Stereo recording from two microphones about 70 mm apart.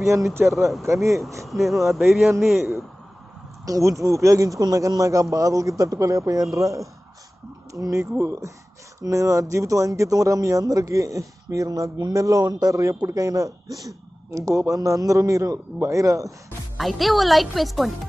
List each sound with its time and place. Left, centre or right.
0.0 s a man's voice: right
1.5 s speech: centre
3.6 s a man's voice: right
16.7 s speech: centre